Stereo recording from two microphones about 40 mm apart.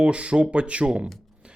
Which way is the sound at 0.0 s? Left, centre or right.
Right.